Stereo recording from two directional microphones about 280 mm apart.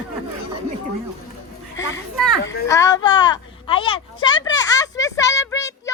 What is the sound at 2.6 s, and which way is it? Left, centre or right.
Speech, centre.